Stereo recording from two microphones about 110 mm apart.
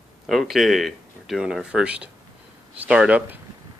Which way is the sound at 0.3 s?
Centre (ahead or behind).